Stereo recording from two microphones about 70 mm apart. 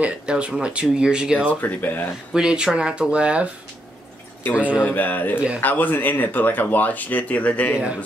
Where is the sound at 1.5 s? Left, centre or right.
Left.